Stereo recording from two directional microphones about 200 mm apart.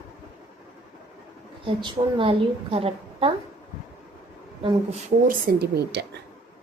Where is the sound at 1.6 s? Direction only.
25° right (ahead or behind).